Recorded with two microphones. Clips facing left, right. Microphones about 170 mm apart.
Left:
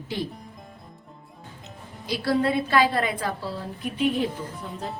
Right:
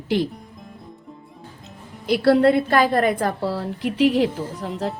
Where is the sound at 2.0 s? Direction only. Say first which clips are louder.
Right 8 dB; 65° right (ahead or behind).